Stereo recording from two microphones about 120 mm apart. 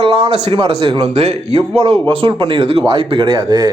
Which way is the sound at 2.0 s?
45° right (ahead or behind).